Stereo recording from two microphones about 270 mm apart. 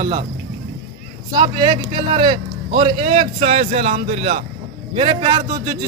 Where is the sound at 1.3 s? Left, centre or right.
Centre.